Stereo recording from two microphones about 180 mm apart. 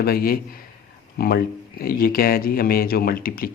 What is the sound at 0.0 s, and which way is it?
Speech, 55° left (ahead or behind).